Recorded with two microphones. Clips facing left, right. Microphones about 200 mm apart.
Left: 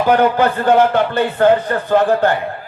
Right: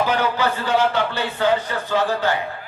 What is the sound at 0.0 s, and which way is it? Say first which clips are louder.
A man's voice: left 7 dB; 55° left (ahead or behind).